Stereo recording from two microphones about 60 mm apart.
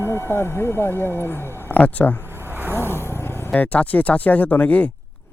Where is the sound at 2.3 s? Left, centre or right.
Right.